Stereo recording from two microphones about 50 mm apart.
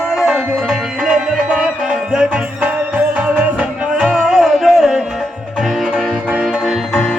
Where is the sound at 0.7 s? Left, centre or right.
Centre.